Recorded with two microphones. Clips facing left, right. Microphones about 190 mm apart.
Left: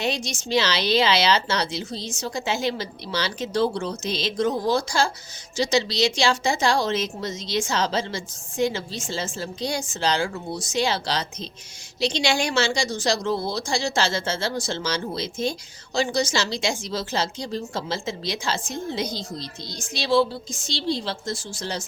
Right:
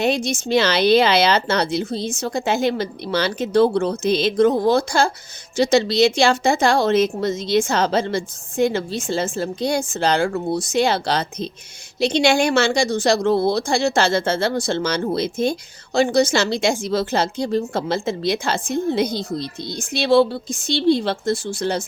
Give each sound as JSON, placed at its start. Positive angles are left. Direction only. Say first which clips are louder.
{"t": 0.0, "sound": "speech", "louder": "right 7 dB", "side_deg": -55}